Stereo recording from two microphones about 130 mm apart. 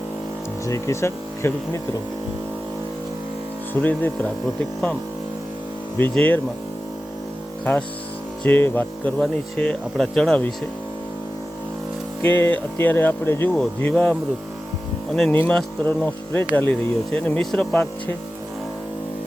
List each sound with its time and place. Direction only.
0.6 s speech: 20° left (ahead or behind)
3.8 s speech: 15° left (ahead or behind)
6.0 s speech: 15° left (ahead or behind)
7.6 s speech: 10° left (ahead or behind)
12.2 s speech: 10° left (ahead or behind)
15.3 s speech: 10° left (ahead or behind)